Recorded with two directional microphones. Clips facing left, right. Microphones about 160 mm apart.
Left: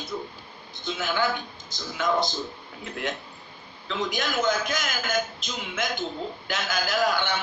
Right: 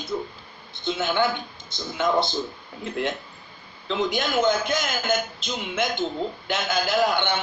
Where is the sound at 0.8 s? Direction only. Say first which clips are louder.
Right 3 dB; 25° right (ahead or behind).